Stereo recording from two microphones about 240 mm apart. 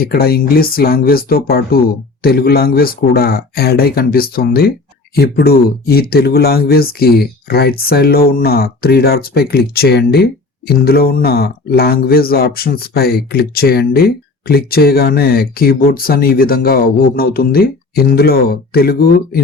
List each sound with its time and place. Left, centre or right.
0.0 s speech: left